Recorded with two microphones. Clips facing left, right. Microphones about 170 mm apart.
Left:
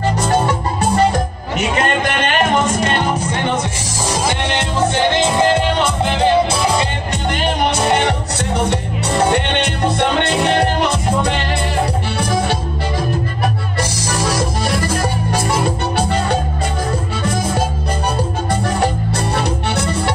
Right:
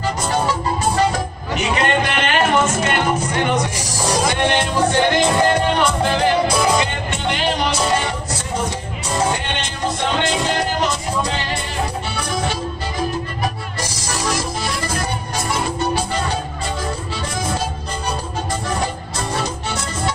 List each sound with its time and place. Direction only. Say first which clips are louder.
5.1 s music: left 1 dB; 25° left (ahead or behind)
6.8 s music: left 1 dB; 40° left (ahead or behind)
7.6 s music: left 7 dB; 60° left (ahead or behind)